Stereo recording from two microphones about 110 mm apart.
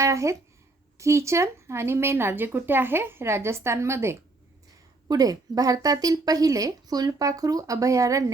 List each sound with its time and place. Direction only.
0.0 s a woman's voice: 25° right (ahead or behind)
5.0 s speech: 35° right (ahead or behind)